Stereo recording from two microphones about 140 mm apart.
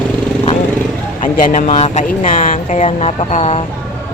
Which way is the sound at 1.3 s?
70° left (ahead or behind).